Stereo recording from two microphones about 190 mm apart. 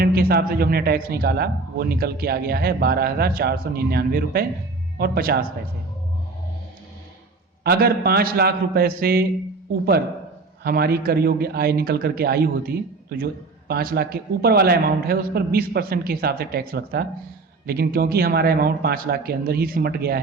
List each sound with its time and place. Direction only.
0.0 s a man's voice: 55° right (ahead or behind)
7.6 s a man's voice: 55° right (ahead or behind)
10.6 s a man's voice: 55° right (ahead or behind)